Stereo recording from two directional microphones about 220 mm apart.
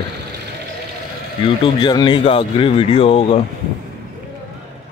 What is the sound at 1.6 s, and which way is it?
Speech, 20° left (ahead or behind).